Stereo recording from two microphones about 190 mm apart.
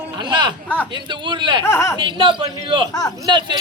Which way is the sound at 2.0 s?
25° right (ahead or behind).